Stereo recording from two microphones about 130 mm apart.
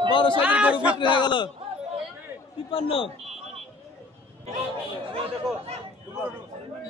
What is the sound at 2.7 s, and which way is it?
Speech, 45° left (ahead or behind).